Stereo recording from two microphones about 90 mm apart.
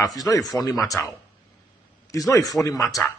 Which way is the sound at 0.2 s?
40° left (ahead or behind).